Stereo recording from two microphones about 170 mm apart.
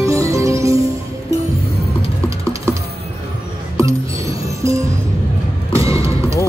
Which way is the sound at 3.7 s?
20° right (ahead or behind).